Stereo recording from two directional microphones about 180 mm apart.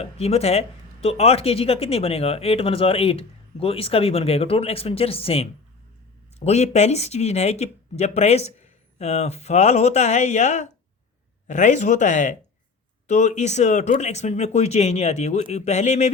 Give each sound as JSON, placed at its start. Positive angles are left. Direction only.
{"t": 0.0, "sound": "speech", "side_deg": 35}